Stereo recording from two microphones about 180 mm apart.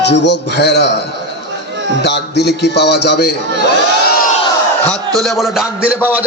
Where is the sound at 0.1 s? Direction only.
70° left (ahead or behind).